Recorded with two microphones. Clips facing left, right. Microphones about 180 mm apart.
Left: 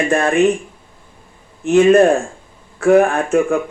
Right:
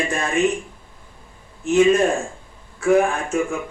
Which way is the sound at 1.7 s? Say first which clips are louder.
Left 6 dB; 60° left (ahead or behind).